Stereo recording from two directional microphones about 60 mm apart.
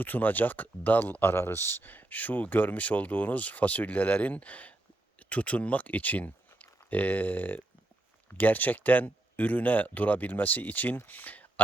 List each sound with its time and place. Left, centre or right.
0.0 s speech: left